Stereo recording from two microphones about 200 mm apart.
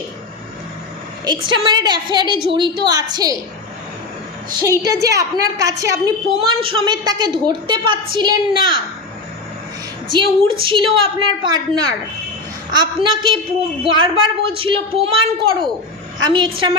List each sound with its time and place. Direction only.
1.5 s a woman's voice: 20° right (ahead or behind)
4.8 s a woman's voice: 15° right (ahead or behind)
10.1 s a woman's voice: 25° right (ahead or behind)